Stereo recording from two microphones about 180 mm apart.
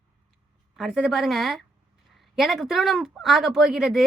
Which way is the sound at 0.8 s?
Centre (ahead or behind).